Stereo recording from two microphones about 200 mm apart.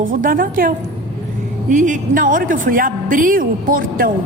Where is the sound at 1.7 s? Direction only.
40° right (ahead or behind).